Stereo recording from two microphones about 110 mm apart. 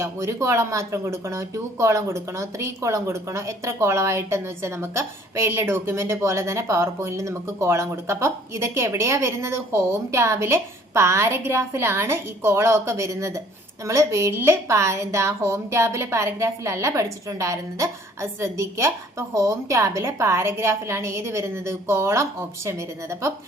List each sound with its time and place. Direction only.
0.0 s speech: 25° right (ahead or behind)